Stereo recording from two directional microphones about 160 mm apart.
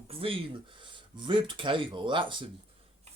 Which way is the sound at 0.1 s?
35° right (ahead or behind).